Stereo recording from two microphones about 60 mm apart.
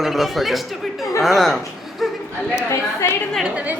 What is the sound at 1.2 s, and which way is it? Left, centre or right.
Speech, centre.